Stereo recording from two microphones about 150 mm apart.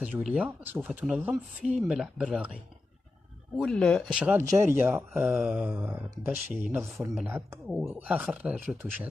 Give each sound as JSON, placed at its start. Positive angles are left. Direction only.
{"t": 0.0, "sound": "speech", "side_deg": -5}
{"t": 4.2, "sound": "speech", "side_deg": -10}
{"t": 5.3, "sound": "speech", "side_deg": -5}